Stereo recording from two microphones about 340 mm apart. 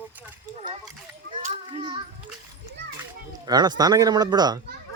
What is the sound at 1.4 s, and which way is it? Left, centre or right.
Speech, centre.